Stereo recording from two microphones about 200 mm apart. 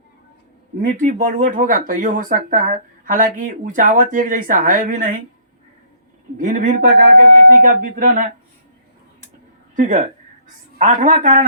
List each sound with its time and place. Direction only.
0.9 s speech: 40° right (ahead or behind)
6.4 s speech: 40° right (ahead or behind)
9.7 s speech: 40° right (ahead or behind)